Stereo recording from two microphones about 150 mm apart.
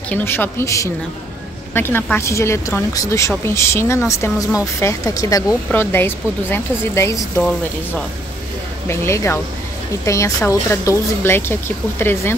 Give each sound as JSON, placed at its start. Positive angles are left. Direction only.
{"t": 0.1, "sound": "a woman's voice", "side_deg": 15}
{"t": 8.8, "sound": "a woman's voice", "side_deg": 20}